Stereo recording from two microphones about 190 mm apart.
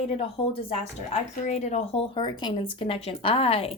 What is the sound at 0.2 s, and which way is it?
Speech, 30° left (ahead or behind).